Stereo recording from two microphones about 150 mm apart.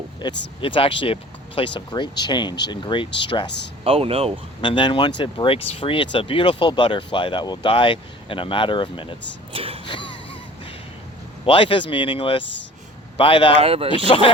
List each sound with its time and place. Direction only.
0.2 s speech: 30° left (ahead or behind)
3.8 s speech: 40° right (ahead or behind)
4.6 s speech: 35° left (ahead or behind)
9.5 s vehicle: 40° right (ahead or behind)
9.8 s a sound: 35° left (ahead or behind)
11.4 s speech: 35° left (ahead or behind)
13.6 s speech: 40° right (ahead or behind)
13.9 s speech: 35° left (ahead or behind)